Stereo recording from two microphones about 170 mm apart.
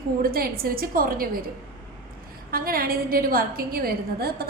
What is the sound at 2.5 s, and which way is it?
A woman's voice, 60° right (ahead or behind).